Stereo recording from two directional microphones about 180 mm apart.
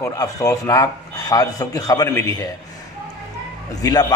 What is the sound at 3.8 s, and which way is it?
Speech, 20° left (ahead or behind).